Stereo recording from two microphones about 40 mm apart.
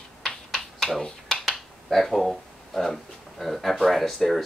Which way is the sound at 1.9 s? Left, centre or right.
Centre.